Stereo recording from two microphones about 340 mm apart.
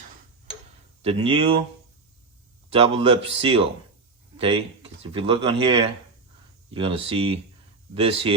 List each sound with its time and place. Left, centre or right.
1.0 s speech: centre
2.7 s speech: centre